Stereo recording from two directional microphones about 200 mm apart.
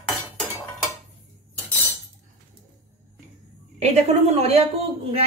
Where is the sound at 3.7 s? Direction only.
30° right (ahead or behind).